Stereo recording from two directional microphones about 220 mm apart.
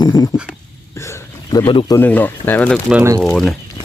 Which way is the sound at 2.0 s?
10° left (ahead or behind).